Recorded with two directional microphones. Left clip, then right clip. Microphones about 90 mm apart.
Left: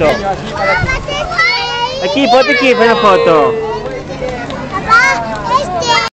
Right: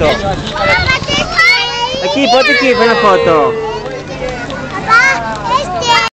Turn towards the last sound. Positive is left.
turn(degrees=0)  # may be behind; listen again after turning